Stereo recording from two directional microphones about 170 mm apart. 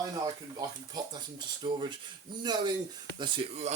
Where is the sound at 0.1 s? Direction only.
25° right (ahead or behind).